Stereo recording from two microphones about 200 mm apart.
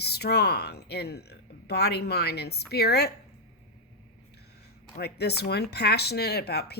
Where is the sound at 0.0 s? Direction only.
55° left (ahead or behind).